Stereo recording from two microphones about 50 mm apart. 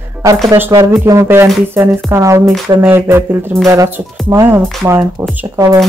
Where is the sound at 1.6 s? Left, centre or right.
Right.